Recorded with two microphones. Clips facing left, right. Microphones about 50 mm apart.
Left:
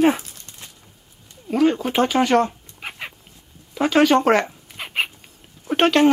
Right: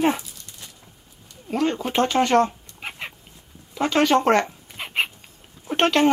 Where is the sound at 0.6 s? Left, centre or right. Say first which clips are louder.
Left 1 dB; left.